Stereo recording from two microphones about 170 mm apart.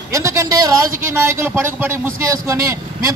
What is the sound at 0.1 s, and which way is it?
A man's voice, 20° right (ahead or behind).